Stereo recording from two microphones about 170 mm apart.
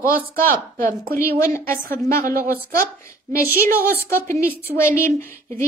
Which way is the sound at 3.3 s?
10° right (ahead or behind).